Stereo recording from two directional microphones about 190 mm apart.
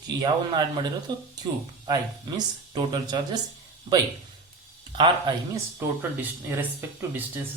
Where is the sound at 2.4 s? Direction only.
20° right (ahead or behind).